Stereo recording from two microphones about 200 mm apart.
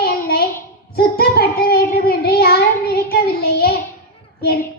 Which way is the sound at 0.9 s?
50° left (ahead or behind).